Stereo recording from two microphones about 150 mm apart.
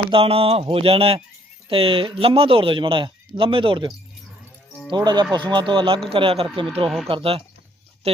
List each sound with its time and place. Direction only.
0.1 s speech: 40° right (ahead or behind)
6.8 s speech: centre (ahead or behind)
7.1 s speech: 40° right (ahead or behind)